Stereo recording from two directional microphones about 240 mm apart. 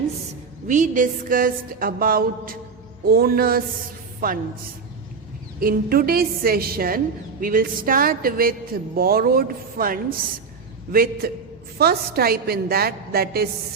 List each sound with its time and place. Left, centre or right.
0.7 s speech: right
5.5 s speech: right